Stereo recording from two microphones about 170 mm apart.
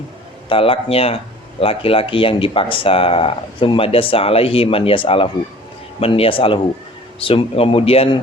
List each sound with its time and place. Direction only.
0.4 s speech: 30° left (ahead or behind)